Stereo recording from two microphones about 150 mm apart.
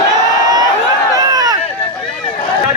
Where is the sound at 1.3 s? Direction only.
25° right (ahead or behind).